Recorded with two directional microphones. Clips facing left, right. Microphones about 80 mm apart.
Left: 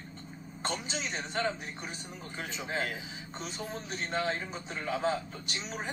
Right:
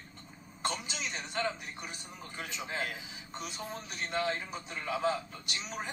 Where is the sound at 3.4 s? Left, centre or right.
Left.